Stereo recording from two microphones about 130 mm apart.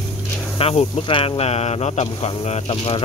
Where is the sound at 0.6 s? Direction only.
50° left (ahead or behind).